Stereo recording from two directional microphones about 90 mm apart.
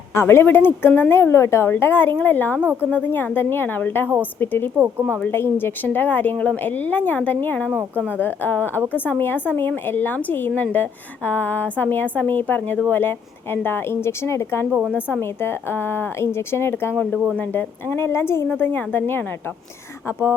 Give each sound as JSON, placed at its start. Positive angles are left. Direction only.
{"t": 0.1, "sound": "a woman's voice", "side_deg": 30}
{"t": 4.8, "sound": "speech", "side_deg": -25}
{"t": 5.3, "sound": "a woman's voice", "side_deg": 25}
{"t": 14.7, "sound": "a woman's voice", "side_deg": -10}
{"t": 15.2, "sound": "a woman's voice", "side_deg": 25}